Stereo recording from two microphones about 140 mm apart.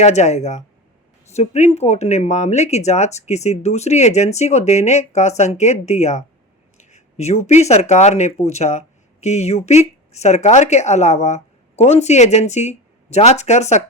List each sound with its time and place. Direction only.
0.0 s speech: 55° left (ahead or behind)